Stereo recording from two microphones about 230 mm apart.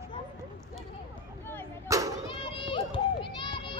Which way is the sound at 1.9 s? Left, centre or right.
Centre.